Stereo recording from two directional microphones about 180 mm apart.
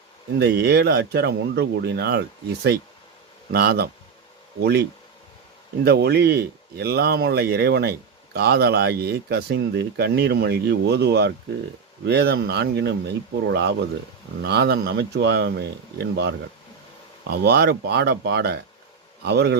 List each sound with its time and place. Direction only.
0.3 s speech: 65° right (ahead or behind)
3.5 s speech: 65° right (ahead or behind)